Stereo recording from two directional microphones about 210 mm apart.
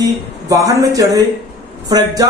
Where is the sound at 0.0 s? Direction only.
15° right (ahead or behind).